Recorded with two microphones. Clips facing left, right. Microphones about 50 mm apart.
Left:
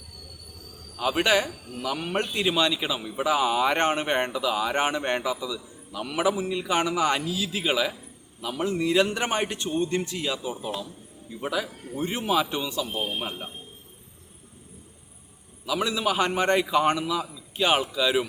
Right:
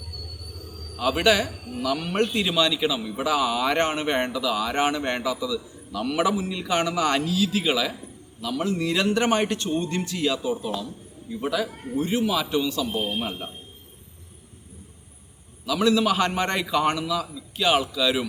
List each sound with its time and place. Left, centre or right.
1.1 s a man's voice: left
11.9 s speech: left
15.6 s speech: centre